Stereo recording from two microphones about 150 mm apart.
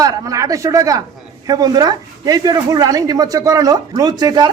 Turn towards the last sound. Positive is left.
turn(degrees=-30)  # may be behind; listen again after turning